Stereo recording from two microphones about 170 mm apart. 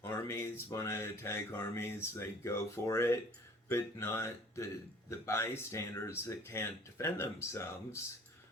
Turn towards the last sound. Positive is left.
turn(degrees=15)  # may be behind; listen again after turning